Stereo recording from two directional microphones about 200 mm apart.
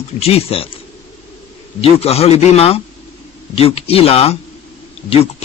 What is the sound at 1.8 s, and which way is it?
A man's voice, 30° left (ahead or behind).